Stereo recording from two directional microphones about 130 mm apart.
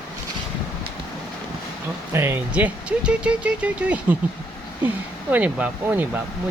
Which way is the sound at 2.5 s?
10° right (ahead or behind).